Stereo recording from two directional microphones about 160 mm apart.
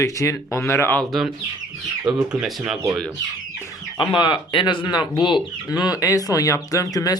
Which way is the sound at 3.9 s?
30° left (ahead or behind).